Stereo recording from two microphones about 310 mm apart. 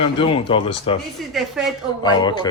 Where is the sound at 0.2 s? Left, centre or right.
Centre.